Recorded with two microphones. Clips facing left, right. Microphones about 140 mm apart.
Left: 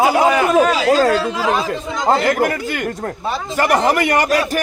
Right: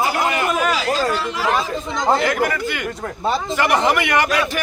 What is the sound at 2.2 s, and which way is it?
A man's voice, 45° left (ahead or behind).